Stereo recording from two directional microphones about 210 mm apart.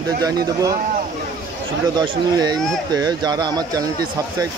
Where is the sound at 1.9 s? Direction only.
20° right (ahead or behind).